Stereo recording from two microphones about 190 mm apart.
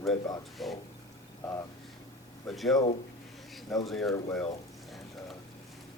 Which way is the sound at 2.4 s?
Centre (ahead or behind).